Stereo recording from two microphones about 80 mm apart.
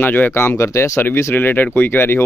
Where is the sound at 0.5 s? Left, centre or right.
Left.